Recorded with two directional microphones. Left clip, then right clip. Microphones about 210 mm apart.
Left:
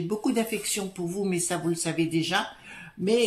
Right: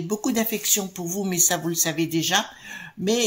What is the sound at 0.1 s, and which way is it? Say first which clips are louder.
Speech: right 3 dB; 35° right (ahead or behind).